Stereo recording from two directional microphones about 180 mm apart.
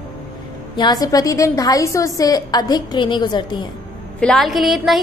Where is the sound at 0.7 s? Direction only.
20° left (ahead or behind).